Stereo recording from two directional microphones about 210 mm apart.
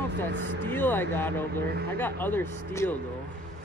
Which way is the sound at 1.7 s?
50° right (ahead or behind).